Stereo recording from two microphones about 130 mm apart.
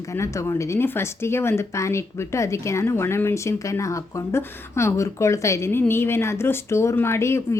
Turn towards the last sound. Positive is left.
turn(degrees=20)  # may be behind; listen again after turning